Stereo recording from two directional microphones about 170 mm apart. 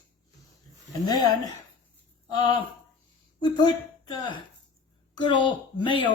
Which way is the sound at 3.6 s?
25° left (ahead or behind).